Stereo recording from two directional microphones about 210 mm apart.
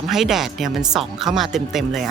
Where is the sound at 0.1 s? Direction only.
Centre (ahead or behind).